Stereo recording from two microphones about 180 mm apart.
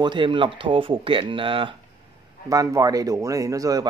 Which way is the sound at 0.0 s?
25° right (ahead or behind).